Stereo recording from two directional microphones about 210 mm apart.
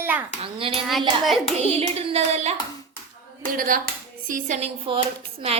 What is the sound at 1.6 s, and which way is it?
Hands, 30° right (ahead or behind).